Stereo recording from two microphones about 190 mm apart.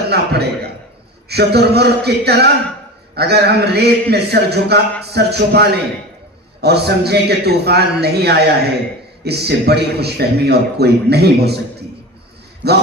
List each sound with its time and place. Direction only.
0.1 s a sound: 60° right (ahead or behind)
1.3 s a man's voice: 60° right (ahead or behind)
12.6 s a man's voice: 60° right (ahead or behind)